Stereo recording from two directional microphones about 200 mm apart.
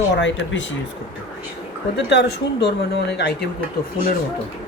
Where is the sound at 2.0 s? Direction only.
60° left (ahead or behind).